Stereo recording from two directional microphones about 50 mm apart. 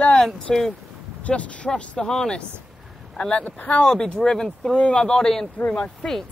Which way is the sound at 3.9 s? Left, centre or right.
Centre.